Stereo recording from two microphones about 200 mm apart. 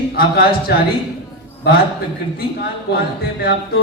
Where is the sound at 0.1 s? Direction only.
50° left (ahead or behind).